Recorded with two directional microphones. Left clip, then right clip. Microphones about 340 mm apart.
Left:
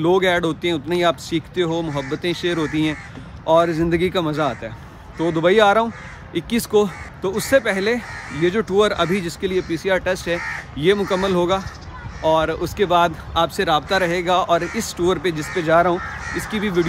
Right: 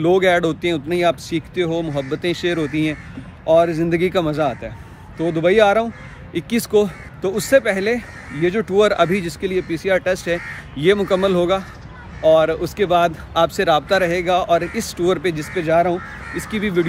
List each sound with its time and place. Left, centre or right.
0.0 s speech: centre